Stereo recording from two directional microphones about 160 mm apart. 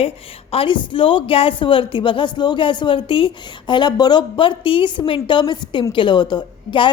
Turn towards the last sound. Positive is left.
turn(degrees=30)  # may be behind; listen again after turning